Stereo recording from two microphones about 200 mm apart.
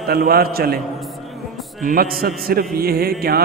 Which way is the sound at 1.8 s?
45° right (ahead or behind).